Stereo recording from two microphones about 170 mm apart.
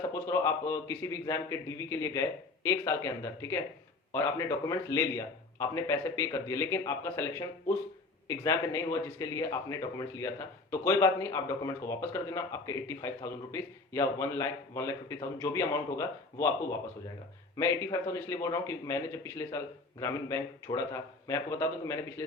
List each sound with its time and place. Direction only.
0.1 s a man's voice: 15° left (ahead or behind)
4.1 s a man's voice: 15° left (ahead or behind)
17.6 s a man's voice: 15° left (ahead or behind)